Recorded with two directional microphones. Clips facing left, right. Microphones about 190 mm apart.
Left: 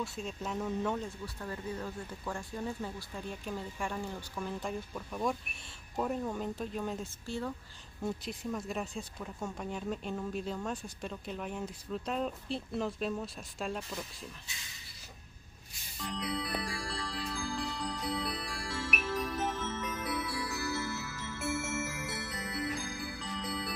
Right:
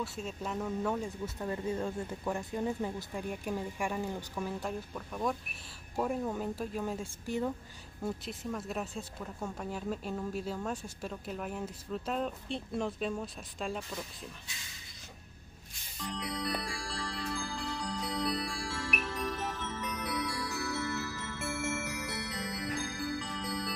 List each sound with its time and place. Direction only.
0.0 s speech: 5° right (ahead or behind)
1.0 s speech: 20° right (ahead or behind)
8.0 s speech: centre (ahead or behind)
16.1 s glockenspiel: centre (ahead or behind)
23.1 s music: centre (ahead or behind)